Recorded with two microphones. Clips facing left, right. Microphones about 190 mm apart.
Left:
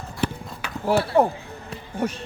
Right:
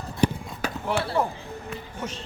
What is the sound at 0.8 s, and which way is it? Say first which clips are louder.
Speech: left 7 dB; 35° left (ahead or behind).